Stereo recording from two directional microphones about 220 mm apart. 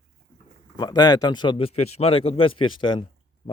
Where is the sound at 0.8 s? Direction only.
20° left (ahead or behind).